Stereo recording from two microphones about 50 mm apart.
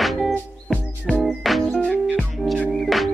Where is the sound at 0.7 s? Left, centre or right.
Left.